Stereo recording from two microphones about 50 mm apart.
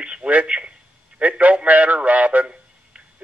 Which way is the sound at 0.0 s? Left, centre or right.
Right.